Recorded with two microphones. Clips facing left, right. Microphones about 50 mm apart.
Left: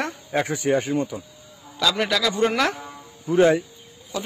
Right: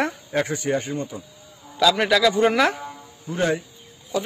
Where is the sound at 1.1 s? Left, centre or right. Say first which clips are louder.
Left 2 dB; centre.